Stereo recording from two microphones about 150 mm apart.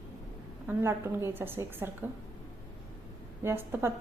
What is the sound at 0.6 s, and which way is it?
A woman's voice, 15° right (ahead or behind).